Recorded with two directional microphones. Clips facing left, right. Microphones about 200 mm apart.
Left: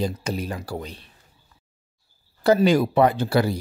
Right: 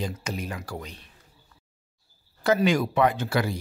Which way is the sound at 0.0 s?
35° left (ahead or behind).